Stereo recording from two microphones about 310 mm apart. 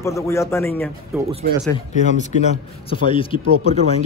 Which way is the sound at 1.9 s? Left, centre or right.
Left.